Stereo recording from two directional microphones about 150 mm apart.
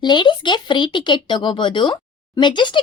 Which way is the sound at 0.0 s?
30° left (ahead or behind).